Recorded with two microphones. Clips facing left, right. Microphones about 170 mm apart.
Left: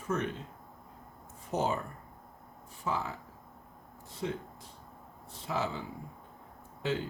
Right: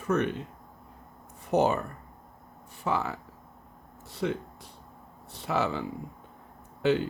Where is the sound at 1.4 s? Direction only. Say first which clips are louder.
Right 7 dB; 70° right (ahead or behind).